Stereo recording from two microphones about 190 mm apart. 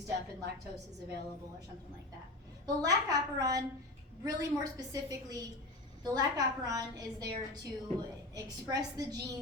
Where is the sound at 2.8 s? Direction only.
20° right (ahead or behind).